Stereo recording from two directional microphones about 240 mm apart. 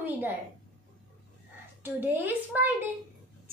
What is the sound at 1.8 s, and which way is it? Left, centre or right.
Speech, centre.